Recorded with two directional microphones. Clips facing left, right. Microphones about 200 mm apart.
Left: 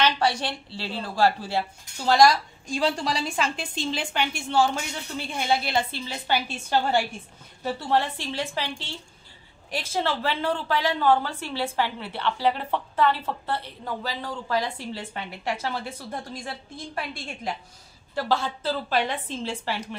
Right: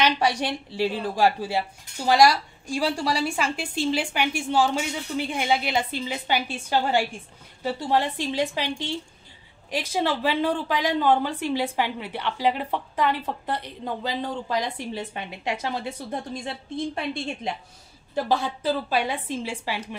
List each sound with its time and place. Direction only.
0.0 s a woman's voice: 15° right (ahead or behind)